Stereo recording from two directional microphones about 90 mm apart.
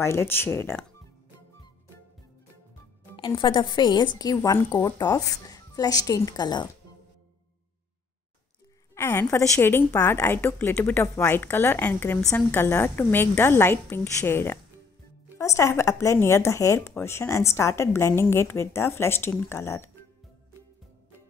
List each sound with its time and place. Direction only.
0.0 s a woman's voice: 30° left (ahead or behind)
3.3 s a woman's voice: 60° left (ahead or behind)
8.9 s a woman's voice: 25° left (ahead or behind)